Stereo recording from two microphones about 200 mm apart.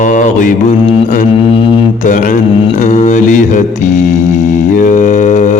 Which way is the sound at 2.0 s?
40° left (ahead or behind).